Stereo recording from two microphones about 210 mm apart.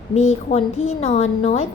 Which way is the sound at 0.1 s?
30° left (ahead or behind).